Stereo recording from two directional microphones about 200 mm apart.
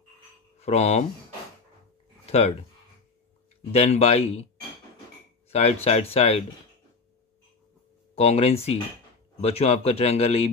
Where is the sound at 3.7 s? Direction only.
30° left (ahead or behind).